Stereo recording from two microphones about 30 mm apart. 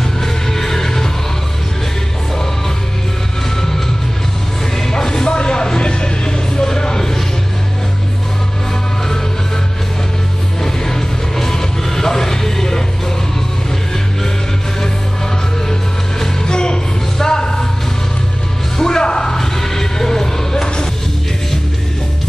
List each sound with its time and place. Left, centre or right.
0.2 s music: centre
4.9 s a sound: left
10.6 s music: centre
16.4 s music: left
17.2 s a sound: left
18.8 s music: left
19.3 s music: centre